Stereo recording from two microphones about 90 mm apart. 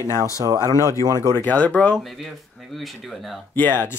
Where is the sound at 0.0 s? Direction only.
35° right (ahead or behind).